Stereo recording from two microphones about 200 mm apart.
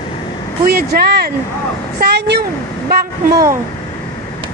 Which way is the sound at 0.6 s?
50° right (ahead or behind).